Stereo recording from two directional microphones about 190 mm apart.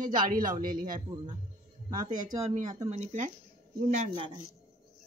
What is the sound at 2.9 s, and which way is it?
Speech, 40° right (ahead or behind).